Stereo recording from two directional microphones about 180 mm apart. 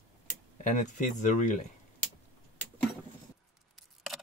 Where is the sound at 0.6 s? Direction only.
40° left (ahead or behind).